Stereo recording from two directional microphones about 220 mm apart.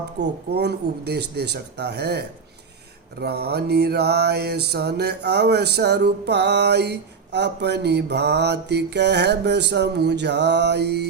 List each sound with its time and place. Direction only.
0.2 s mantra: 50° right (ahead or behind)